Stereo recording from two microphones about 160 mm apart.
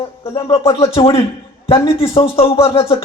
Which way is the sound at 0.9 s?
35° left (ahead or behind).